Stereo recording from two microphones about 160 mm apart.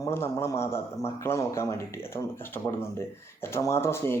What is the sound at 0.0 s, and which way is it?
Speech, 15° left (ahead or behind).